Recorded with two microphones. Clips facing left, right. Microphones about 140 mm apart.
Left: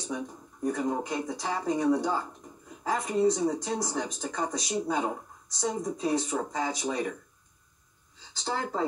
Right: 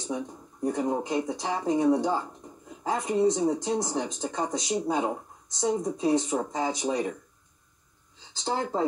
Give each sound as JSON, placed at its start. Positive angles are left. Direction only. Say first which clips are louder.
{"t": 0.1, "sound": "speech", "louder": "right 3 dB", "side_deg": -25}
{"t": 8.3, "sound": "speech", "louder": "right 3 dB", "side_deg": -25}